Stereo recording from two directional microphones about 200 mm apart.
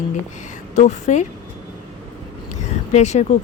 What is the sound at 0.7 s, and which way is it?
Speech, 35° left (ahead or behind).